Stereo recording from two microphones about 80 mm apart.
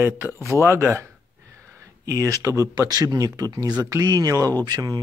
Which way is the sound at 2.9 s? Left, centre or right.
Right.